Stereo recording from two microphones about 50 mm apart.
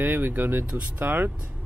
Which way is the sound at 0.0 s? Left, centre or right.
Right.